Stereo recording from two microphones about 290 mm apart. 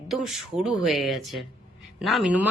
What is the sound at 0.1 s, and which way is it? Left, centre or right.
A woman's voice, centre.